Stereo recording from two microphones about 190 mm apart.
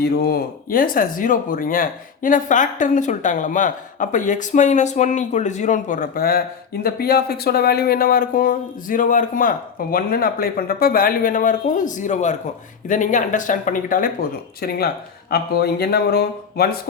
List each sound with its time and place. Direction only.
0.0 s speech: 55° left (ahead or behind)